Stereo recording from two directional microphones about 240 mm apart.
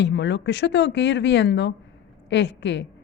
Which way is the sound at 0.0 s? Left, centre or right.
Left.